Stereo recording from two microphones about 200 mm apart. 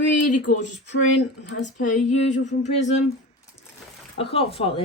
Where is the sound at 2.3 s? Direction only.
35° left (ahead or behind).